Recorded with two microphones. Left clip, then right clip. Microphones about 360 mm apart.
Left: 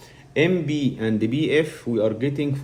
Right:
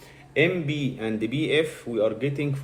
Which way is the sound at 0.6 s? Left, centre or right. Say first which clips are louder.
Left 4 dB; left.